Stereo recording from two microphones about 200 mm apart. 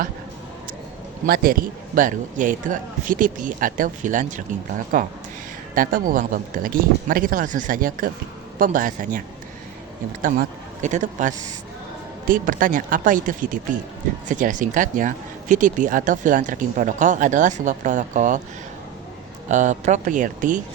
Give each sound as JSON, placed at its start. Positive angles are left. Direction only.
{"t": 1.3, "sound": "speech", "side_deg": -45}
{"t": 19.5, "sound": "speech", "side_deg": -35}